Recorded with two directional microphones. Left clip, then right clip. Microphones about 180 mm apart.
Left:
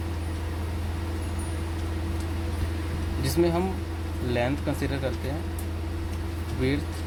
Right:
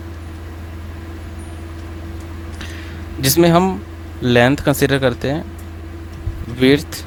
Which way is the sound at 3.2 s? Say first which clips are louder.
Right 12 dB; 75° right (ahead or behind).